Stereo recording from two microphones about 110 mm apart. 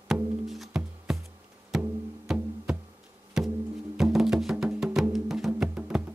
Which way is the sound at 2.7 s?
5° right (ahead or behind).